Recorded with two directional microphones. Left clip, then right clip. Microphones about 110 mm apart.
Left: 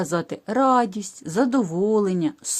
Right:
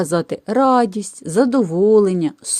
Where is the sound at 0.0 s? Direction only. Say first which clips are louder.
Right 6 dB; 45° right (ahead or behind).